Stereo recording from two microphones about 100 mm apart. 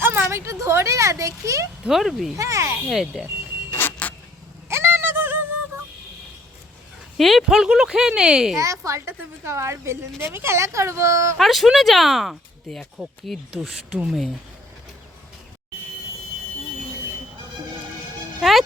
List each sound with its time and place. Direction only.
0.0 s speech: 25° right (ahead or behind)
1.8 s speech: centre (ahead or behind)
2.3 s speech: 30° right (ahead or behind)
2.8 s speech: 5° right (ahead or behind)
3.8 s vehicle: 20° left (ahead or behind)
4.7 s music: 25° right (ahead or behind)
7.2 s speech: centre (ahead or behind)
8.5 s a woman's voice: 30° right (ahead or behind)
11.3 s speech: centre (ahead or behind)
13.5 s speech: 5° right (ahead or behind)
18.3 s speech: centre (ahead or behind)